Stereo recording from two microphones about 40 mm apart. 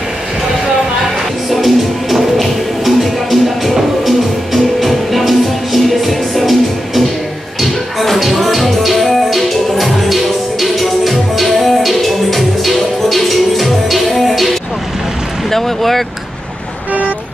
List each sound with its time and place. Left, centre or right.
1.5 s music: centre
7.6 s music: centre
15.5 s a sound: centre